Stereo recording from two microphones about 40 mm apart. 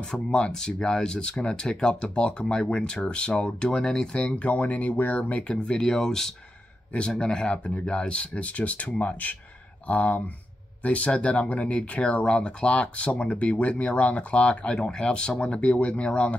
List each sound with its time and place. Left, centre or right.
0.1 s speech: left
4.2 s speech: left
5.5 s speech: left
5.8 s speech: centre
7.5 s speech: left
7.8 s speech: left